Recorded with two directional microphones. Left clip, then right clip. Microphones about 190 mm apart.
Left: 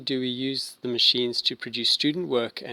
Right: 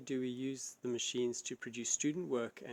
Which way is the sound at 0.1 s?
40° left (ahead or behind).